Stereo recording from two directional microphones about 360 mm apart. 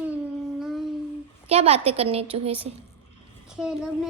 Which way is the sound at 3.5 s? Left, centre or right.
Centre.